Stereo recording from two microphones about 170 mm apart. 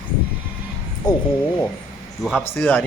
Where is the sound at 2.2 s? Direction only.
Centre (ahead or behind).